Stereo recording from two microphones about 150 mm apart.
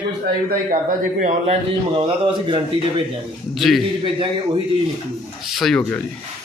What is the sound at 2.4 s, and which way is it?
Speech, 30° right (ahead or behind).